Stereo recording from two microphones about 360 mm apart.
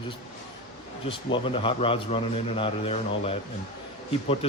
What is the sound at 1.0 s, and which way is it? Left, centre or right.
A man's voice, centre.